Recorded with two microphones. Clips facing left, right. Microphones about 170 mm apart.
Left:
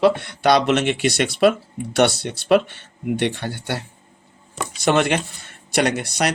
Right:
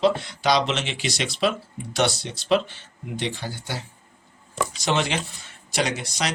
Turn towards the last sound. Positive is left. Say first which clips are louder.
# left 6 dB
turn(degrees=60)  # may be behind; listen again after turning